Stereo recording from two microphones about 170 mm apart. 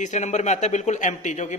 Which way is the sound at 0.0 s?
45° left (ahead or behind).